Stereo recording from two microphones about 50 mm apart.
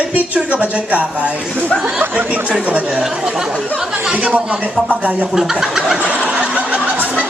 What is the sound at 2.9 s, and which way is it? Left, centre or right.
Speech, centre.